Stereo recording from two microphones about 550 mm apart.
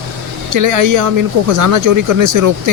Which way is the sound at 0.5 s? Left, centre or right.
Right.